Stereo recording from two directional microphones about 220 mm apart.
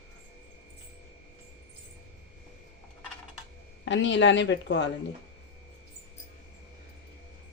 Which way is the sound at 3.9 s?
55° left (ahead or behind).